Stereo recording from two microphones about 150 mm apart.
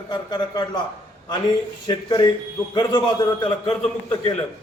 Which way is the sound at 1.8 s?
30° left (ahead or behind).